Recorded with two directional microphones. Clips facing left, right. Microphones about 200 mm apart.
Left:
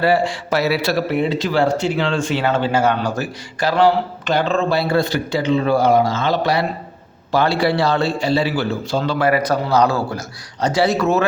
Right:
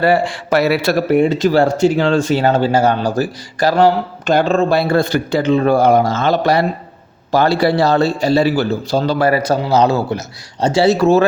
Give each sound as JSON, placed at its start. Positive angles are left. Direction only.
{"t": 0.0, "sound": "a man's voice", "side_deg": -55}